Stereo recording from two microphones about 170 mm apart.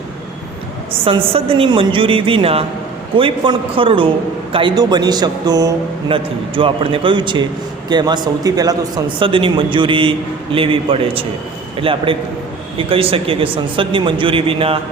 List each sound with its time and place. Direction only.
1.0 s a man's voice: 35° right (ahead or behind)